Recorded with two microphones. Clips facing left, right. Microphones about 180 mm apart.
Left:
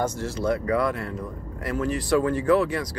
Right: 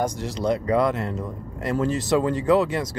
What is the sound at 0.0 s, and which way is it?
Speech, 15° right (ahead or behind).